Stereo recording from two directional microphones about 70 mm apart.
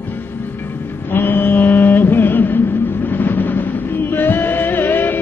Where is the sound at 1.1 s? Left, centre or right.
Left.